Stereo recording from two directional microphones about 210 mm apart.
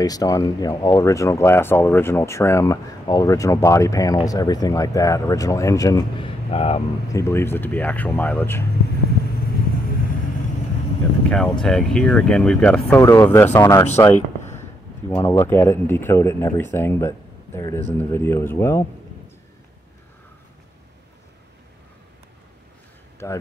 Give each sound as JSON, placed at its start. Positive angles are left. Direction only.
{"t": 0.0, "sound": "speech", "side_deg": 15}
{"t": 6.5, "sound": "speech", "side_deg": 30}
{"t": 7.1, "sound": "speech", "side_deg": 15}
{"t": 11.2, "sound": "speech", "side_deg": 5}
{"t": 13.9, "sound": "a sound", "side_deg": 10}
{"t": 15.1, "sound": "speech", "side_deg": 10}
{"t": 23.2, "sound": "speech", "side_deg": 10}